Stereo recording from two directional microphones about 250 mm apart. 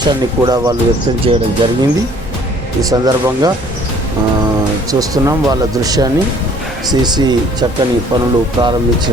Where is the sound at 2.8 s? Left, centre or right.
Centre.